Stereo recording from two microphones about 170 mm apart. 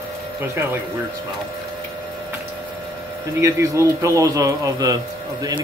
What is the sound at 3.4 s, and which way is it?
Speech, 15° right (ahead or behind).